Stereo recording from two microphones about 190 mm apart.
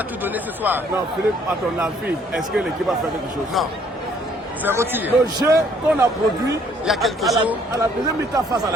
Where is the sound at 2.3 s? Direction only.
5° right (ahead or behind).